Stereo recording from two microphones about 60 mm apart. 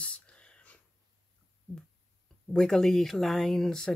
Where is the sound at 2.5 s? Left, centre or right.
Centre.